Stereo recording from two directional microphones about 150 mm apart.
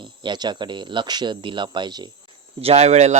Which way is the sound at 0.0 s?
30° right (ahead or behind).